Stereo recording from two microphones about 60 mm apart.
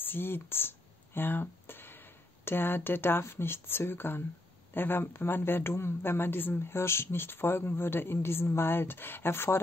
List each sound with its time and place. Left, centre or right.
0.0 s speech: left